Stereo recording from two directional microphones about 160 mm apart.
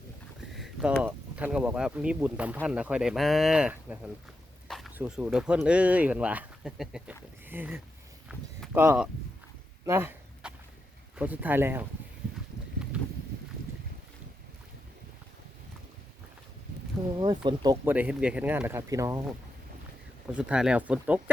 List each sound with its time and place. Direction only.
0.5 s speech: 5° right (ahead or behind)
9.8 s a sound: 15° right (ahead or behind)
11.2 s speech: 10° right (ahead or behind)
12.9 s a sound: 10° right (ahead or behind)
17.2 s speech: 25° right (ahead or behind)
17.8 s speech: 10° right (ahead or behind)
20.3 s speech: 5° right (ahead or behind)